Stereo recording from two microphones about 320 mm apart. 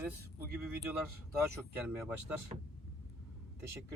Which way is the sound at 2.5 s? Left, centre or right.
Centre.